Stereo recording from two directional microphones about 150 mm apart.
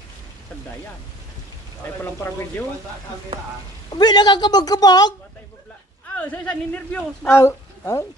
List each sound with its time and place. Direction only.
3.9 s a woman's voice: 30° left (ahead or behind)
6.1 s a man's voice: 10° left (ahead or behind)